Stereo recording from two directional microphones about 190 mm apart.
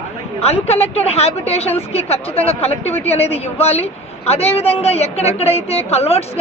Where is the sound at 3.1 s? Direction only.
30° left (ahead or behind).